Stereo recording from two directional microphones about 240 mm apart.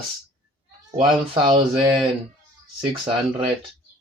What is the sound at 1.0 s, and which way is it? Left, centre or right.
Speech, right.